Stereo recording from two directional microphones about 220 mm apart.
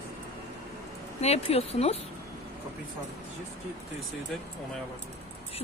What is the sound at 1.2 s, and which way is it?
Speech, 30° left (ahead or behind).